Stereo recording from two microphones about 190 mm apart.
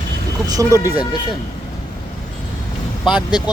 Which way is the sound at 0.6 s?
15° right (ahead or behind).